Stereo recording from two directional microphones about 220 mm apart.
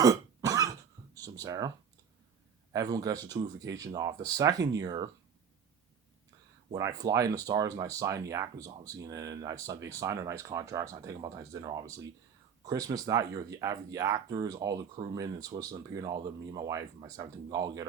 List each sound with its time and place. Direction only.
0.0 s cough: 15° right (ahead or behind)
1.2 s a sound: 15° right (ahead or behind)
2.7 s speech: 15° right (ahead or behind)
6.7 s speech: 15° right (ahead or behind)